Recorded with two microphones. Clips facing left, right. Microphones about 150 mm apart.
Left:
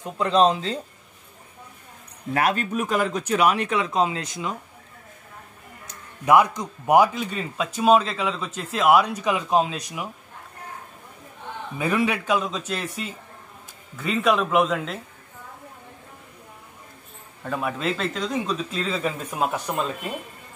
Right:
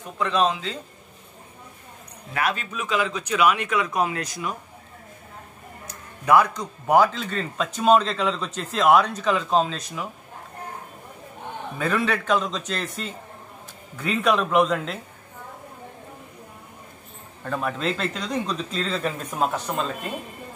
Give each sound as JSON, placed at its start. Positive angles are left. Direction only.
{"t": 0.2, "sound": "speech", "side_deg": 35}
{"t": 2.3, "sound": "speech", "side_deg": 45}
{"t": 6.2, "sound": "speech", "side_deg": 20}
{"t": 11.8, "sound": "speech", "side_deg": 10}
{"t": 17.4, "sound": "speech", "side_deg": 5}